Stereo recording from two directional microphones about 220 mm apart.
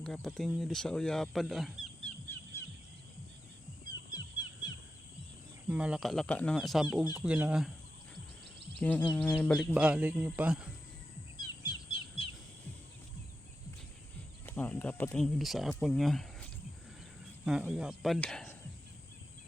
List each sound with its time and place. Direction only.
0.0 s speech: centre (ahead or behind)
5.6 s speech: 5° right (ahead or behind)
8.8 s speech: 5° left (ahead or behind)
11.3 s bird: 20° left (ahead or behind)
14.4 s speech: 10° left (ahead or behind)